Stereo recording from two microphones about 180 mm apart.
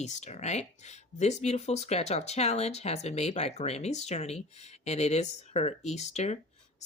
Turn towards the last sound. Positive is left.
turn(degrees=40)  # may be behind; listen again after turning